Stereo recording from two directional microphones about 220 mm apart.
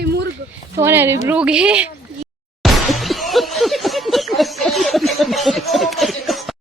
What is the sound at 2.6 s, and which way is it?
Laughter, centre (ahead or behind).